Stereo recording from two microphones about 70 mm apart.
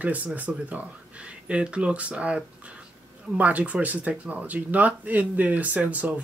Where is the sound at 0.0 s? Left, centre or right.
Right.